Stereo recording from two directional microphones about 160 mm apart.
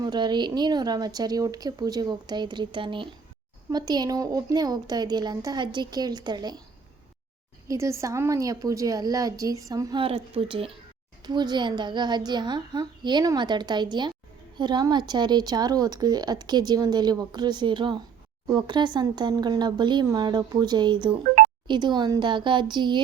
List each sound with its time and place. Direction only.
0.0 s speech: 25° right (ahead or behind)
7.7 s speech: 20° right (ahead or behind)
10.0 s speech: 35° right (ahead or behind)